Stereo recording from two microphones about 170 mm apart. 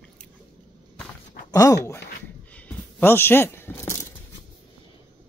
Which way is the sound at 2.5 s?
10° left (ahead or behind).